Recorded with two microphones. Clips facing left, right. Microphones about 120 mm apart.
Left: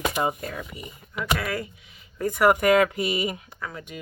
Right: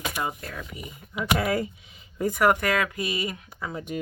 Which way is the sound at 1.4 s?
25° right (ahead or behind).